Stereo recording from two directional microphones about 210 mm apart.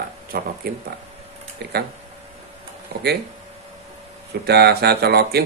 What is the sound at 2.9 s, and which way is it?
Speech, 50° right (ahead or behind).